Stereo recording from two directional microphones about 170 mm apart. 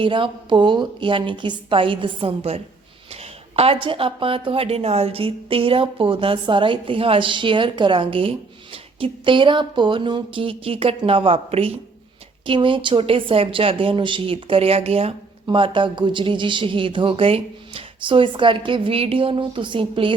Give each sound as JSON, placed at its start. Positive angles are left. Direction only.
{"t": 0.0, "sound": "a woman's voice", "side_deg": -30}